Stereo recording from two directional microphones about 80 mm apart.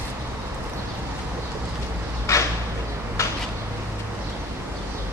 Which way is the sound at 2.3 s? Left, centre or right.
Left.